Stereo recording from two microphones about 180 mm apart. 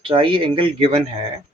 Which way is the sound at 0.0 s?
30° right (ahead or behind).